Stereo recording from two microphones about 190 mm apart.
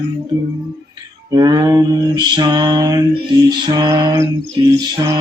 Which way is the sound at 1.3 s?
20° right (ahead or behind).